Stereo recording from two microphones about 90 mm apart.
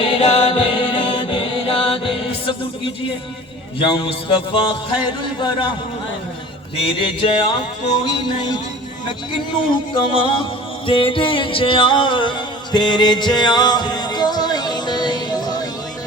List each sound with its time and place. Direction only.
0.0 s music: 80° left
3.8 s a man's voice: 65° left (ahead or behind)
6.8 s a man's voice: 75° left (ahead or behind); by 8.6 s 50° left (ahead or behind)
9.9 s music: 70° left (ahead or behind); by 15.7 s 50° left (ahead or behind)